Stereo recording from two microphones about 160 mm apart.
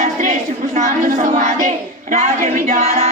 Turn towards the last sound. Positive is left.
turn(degrees=-50)  # may be behind; listen again after turning